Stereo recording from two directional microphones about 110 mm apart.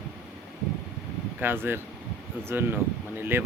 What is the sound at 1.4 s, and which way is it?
Speech, 20° right (ahead or behind).